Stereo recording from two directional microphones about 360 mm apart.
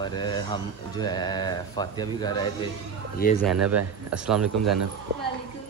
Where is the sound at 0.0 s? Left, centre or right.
Centre.